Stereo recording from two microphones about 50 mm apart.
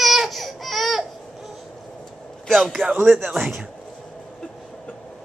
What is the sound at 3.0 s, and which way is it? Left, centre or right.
Speech, centre.